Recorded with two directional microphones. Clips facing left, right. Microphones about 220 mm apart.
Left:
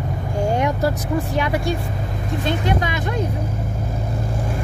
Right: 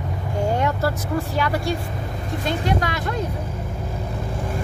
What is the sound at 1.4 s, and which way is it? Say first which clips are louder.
Speech: even; 20° left (ahead or behind).